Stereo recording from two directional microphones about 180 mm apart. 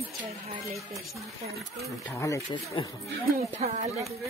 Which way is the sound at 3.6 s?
40° right (ahead or behind).